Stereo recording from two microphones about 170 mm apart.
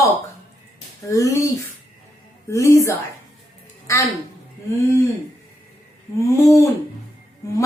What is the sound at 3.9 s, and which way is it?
Speech, 15° left (ahead or behind).